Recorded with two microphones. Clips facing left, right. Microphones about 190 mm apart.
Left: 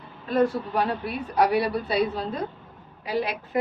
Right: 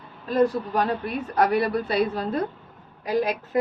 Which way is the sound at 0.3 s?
40° right (ahead or behind).